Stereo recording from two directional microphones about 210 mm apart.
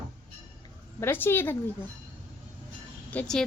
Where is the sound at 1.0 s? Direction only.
10° left (ahead or behind).